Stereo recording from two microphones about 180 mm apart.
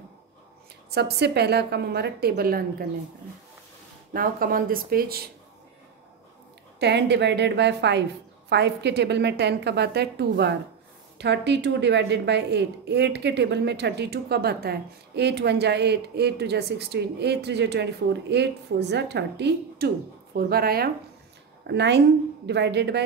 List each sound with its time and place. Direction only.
0.8 s a woman's voice: 65° right (ahead or behind)
4.1 s speech: 55° right (ahead or behind)
6.8 s a woman's voice: 70° right (ahead or behind)
20.3 s a woman's voice: 55° right (ahead or behind)
21.6 s a woman's voice: 70° right (ahead or behind)